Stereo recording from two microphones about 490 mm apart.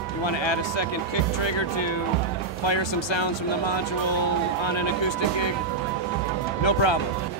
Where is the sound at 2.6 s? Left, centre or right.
Left.